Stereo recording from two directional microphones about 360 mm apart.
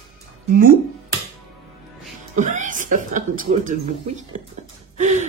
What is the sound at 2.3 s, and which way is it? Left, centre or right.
A woman's voice, right.